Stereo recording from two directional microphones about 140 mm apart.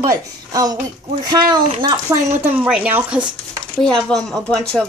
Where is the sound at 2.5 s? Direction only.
10° right (ahead or behind).